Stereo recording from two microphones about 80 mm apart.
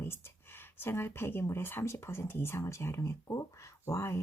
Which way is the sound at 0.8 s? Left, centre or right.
Left.